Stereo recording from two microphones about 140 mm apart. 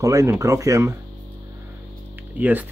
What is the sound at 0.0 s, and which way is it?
Speech, 25° right (ahead or behind).